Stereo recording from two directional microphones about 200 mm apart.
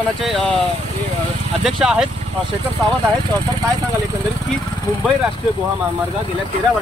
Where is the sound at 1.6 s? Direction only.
Centre (ahead or behind).